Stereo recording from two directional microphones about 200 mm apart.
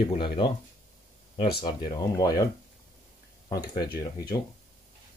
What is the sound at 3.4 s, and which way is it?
Speech, 20° left (ahead or behind).